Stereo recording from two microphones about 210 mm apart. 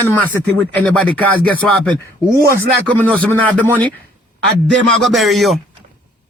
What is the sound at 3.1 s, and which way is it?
A woman's voice, 5° left (ahead or behind).